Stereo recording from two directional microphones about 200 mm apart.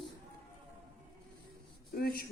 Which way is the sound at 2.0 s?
50° left (ahead or behind).